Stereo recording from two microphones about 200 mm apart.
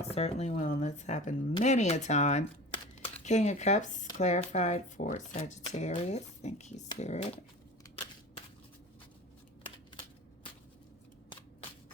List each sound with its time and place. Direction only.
0.0 s speech: 30° left (ahead or behind)